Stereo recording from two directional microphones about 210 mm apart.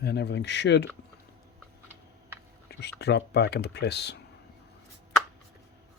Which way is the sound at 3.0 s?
50° left (ahead or behind).